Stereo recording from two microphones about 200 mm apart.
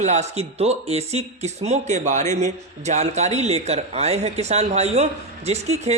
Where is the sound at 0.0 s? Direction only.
35° right (ahead or behind).